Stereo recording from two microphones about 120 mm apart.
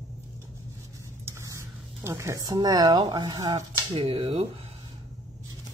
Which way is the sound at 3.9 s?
50° right (ahead or behind).